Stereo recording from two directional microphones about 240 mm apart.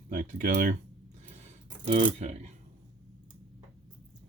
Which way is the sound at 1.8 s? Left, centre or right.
Right.